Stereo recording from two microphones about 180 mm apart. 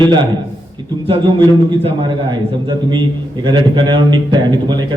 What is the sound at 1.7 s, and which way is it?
A man's voice, 25° right (ahead or behind).